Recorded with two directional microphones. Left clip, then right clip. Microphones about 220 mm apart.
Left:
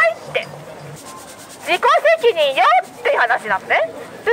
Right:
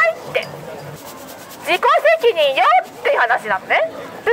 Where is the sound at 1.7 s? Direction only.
Centre (ahead or behind).